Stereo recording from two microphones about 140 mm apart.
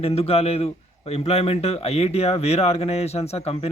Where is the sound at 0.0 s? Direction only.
45° left (ahead or behind).